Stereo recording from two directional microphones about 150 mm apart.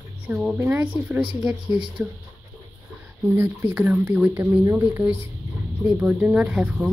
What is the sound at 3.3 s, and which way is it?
Speech, 15° right (ahead or behind).